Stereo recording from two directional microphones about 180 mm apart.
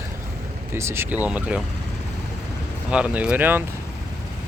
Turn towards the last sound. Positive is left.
turn(degrees=-10)  # may be behind; listen again after turning